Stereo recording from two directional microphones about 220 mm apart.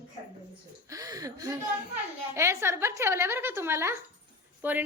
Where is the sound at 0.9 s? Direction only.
15° right (ahead or behind).